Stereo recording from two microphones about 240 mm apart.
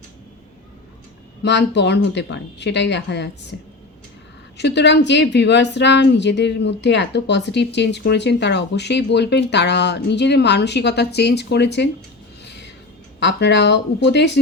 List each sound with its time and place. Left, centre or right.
1.5 s a woman's voice: left
12.5 s a sound: left
13.1 s a woman's voice: left